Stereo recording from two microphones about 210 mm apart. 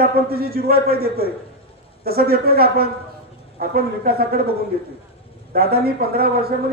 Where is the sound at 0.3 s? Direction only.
45° right (ahead or behind).